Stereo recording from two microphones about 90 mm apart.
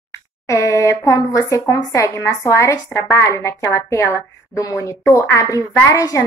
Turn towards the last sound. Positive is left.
turn(degrees=35)  # may be behind; listen again after turning